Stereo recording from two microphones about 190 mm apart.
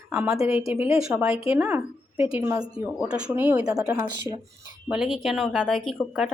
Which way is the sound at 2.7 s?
5° right (ahead or behind).